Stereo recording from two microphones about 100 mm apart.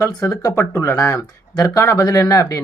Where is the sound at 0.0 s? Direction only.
35° left (ahead or behind).